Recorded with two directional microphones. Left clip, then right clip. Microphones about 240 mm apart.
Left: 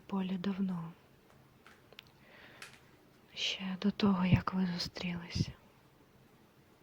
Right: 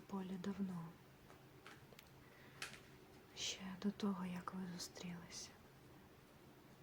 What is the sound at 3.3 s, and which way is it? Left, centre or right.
Speech, left.